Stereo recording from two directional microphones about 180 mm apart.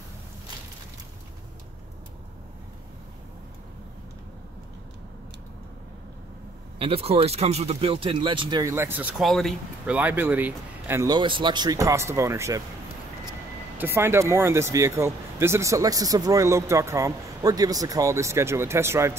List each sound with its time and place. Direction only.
6.8 s speech: 35° right (ahead or behind); by 9.1 s 10° right (ahead or behind)
9.2 s speech: centre (ahead or behind)
9.9 s speech: 10° right (ahead or behind)
13.7 s speech: 15° right (ahead or behind)